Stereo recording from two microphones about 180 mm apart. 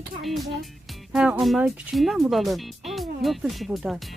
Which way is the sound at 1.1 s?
5° right (ahead or behind).